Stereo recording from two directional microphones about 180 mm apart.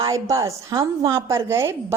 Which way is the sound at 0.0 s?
20° right (ahead or behind).